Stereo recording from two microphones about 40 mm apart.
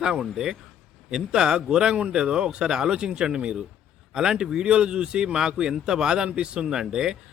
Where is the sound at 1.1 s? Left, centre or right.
Centre.